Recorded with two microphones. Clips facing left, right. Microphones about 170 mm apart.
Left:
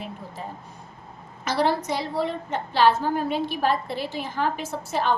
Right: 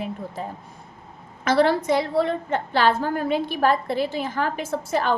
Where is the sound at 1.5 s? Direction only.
55° right (ahead or behind).